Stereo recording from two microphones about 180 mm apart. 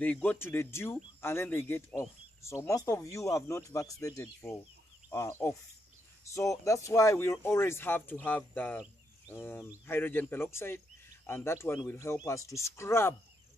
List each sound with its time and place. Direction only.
0.0 s speech: 10° left (ahead or behind)